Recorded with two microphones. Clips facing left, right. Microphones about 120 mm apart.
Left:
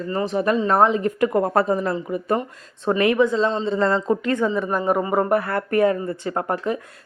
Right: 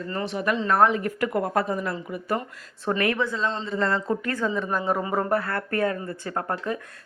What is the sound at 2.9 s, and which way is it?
A woman's voice, 15° left (ahead or behind).